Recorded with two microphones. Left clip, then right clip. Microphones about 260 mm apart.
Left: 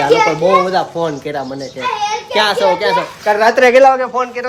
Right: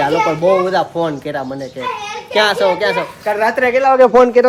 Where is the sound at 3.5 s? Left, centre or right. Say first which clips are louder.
Left 5 dB; left.